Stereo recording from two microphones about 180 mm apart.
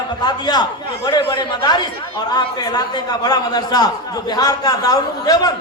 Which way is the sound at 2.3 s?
20° left (ahead or behind).